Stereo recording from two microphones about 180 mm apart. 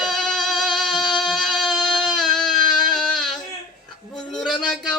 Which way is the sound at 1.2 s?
Centre (ahead or behind).